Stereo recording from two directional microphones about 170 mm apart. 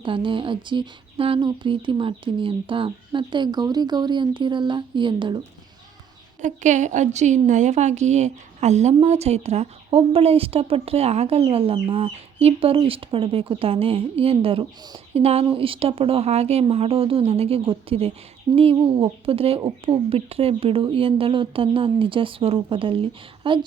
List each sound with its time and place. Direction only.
0.0 s speech: 30° right (ahead or behind)
6.4 s a woman's voice: 45° right (ahead or behind); by 23.6 s 30° right (ahead or behind)